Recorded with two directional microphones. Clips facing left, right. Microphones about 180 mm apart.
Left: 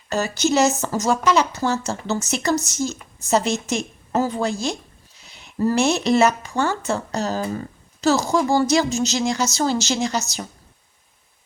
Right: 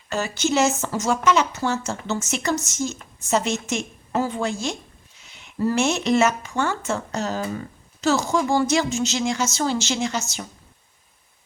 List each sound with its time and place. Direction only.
0.1 s a woman's voice: 40° left (ahead or behind)